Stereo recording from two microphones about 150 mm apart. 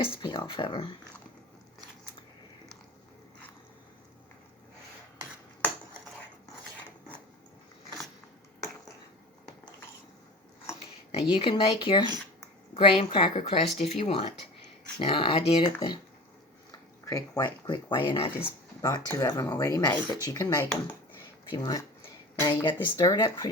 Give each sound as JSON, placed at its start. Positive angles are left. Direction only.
{"t": 0.0, "sound": "speech", "side_deg": 35}
{"t": 11.1, "sound": "speech", "side_deg": 35}
{"t": 17.1, "sound": "speech", "side_deg": 25}
{"t": 18.4, "sound": "speech", "side_deg": 20}